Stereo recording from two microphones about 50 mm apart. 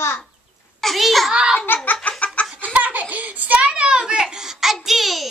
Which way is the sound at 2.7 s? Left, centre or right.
Right.